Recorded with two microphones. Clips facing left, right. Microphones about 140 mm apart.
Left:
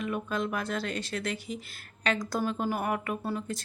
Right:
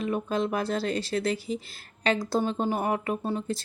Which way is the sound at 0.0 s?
30° right (ahead or behind).